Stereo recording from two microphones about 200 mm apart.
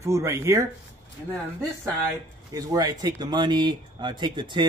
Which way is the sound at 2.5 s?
20° right (ahead or behind).